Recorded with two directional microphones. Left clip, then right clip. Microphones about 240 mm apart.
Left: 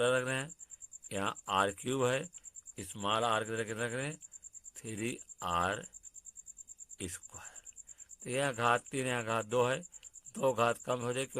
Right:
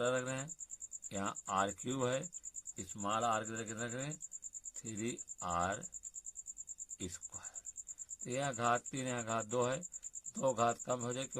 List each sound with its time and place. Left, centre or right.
0.0 s speech: left
7.0 s cricket: left
8.2 s speech: left